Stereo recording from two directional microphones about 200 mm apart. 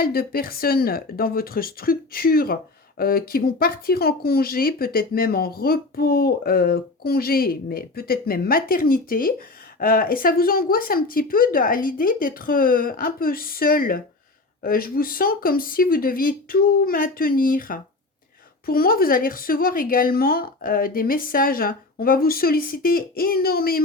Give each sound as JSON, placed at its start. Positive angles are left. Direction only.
{"t": 0.0, "sound": "speech", "side_deg": 50}